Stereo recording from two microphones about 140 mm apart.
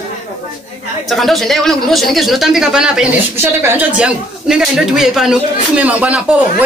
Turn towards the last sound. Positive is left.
turn(degrees=-10)  # may be behind; listen again after turning